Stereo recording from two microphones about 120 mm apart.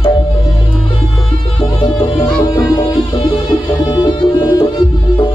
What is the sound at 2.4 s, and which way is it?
Music, 35° left (ahead or behind).